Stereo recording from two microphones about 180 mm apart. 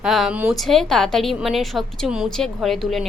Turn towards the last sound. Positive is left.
turn(degrees=0)  # may be behind; listen again after turning